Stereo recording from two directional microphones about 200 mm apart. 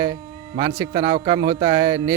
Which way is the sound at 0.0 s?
20° right (ahead or behind).